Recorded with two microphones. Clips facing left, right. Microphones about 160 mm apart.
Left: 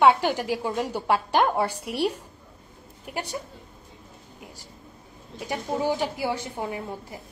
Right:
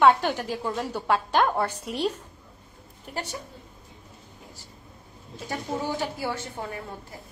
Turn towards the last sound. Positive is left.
turn(degrees=15)  # may be behind; listen again after turning